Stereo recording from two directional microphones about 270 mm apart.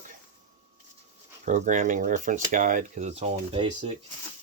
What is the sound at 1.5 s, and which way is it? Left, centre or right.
Speech, right.